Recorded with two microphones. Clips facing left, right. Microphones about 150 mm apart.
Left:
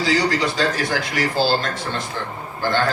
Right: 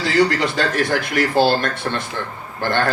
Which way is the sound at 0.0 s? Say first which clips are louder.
Right 2 dB; 55° right (ahead or behind).